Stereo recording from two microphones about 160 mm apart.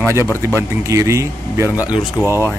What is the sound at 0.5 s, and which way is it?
A man's voice, 20° right (ahead or behind).